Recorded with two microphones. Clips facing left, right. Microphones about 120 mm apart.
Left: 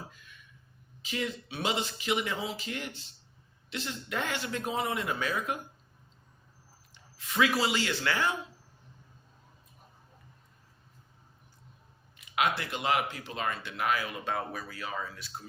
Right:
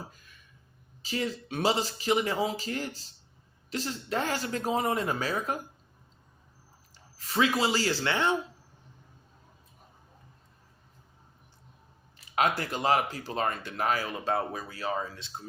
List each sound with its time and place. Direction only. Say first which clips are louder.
0.1 s a sound: left 2 dB; 40° right (ahead or behind)
1.0 s speech: right 2 dB; 35° right (ahead or behind)
6.9 s speech: right 2 dB; 35° right (ahead or behind)
12.1 s speech: right 2 dB; 35° right (ahead or behind)